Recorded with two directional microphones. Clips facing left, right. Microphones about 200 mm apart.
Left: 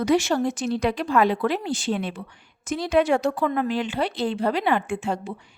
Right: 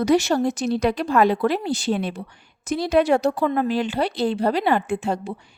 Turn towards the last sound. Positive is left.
turn(degrees=-35)  # may be behind; listen again after turning